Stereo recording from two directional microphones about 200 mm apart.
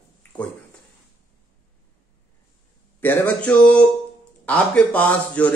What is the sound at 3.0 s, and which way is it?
Speech, 10° left (ahead or behind).